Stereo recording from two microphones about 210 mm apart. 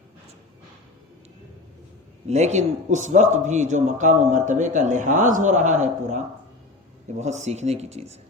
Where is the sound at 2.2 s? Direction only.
35° right (ahead or behind).